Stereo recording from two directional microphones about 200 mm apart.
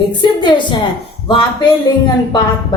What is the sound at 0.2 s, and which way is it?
Speech, 20° left (ahead or behind).